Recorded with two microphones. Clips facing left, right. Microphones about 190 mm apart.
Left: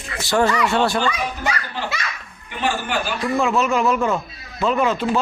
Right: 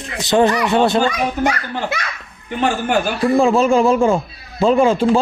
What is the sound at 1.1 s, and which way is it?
A child's voice, 50° right (ahead or behind).